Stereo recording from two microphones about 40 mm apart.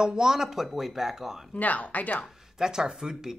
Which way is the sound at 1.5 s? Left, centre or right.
Left.